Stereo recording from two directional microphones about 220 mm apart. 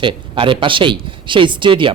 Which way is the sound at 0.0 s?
20° right (ahead or behind).